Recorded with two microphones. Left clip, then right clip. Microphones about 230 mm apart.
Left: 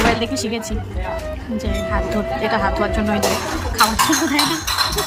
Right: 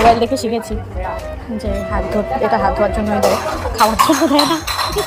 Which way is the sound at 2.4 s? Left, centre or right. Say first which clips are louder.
Right 5 dB; left.